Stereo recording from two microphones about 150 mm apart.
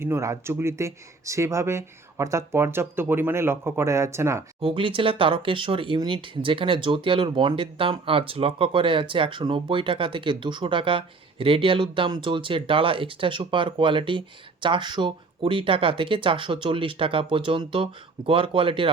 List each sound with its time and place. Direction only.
0.0 s speech: 20° right (ahead or behind)
4.6 s speech: 35° right (ahead or behind)